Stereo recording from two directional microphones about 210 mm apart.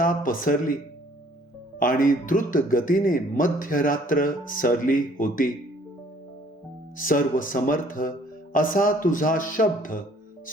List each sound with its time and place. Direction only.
0.0 s speech: 40° left (ahead or behind)
1.8 s speech: 40° left (ahead or behind)
6.9 s speech: 40° left (ahead or behind)